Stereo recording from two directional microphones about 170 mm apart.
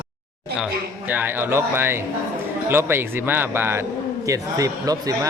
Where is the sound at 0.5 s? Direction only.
10° right (ahead or behind).